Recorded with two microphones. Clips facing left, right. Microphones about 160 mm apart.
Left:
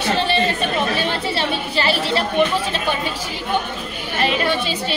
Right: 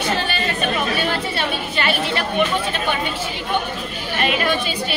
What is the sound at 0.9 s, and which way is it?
Chatter, 30° left (ahead or behind).